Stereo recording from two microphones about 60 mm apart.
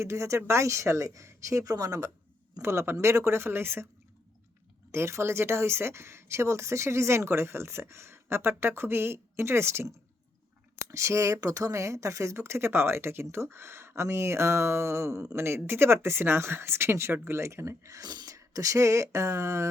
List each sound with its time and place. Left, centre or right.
0.0 s speech: right
2.6 s speech: right
4.9 s speech: right
10.8 s speech: right